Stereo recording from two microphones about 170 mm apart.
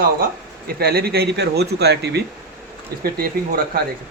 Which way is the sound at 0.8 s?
65° right (ahead or behind).